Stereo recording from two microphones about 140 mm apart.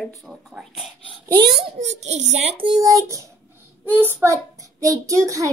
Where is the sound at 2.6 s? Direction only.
25° right (ahead or behind).